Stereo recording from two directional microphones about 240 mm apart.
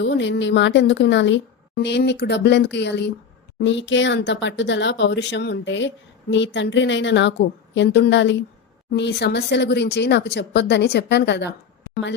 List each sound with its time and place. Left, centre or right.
0.0 s speech: left